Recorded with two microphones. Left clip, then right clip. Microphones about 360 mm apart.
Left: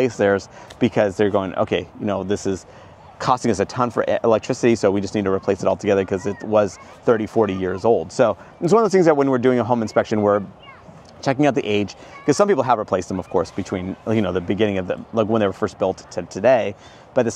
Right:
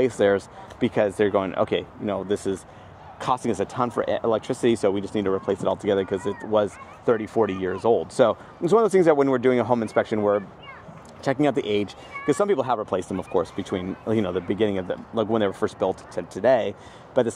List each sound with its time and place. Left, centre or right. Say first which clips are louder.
0.0 s speech: left 2 dB; left
0.9 s speech: left 2 dB; left
3.2 s speech: left 5 dB; left
8.2 s speech: left 2 dB; left
8.7 s speech: left 3 dB; left
12.4 s speech: left 7 dB; left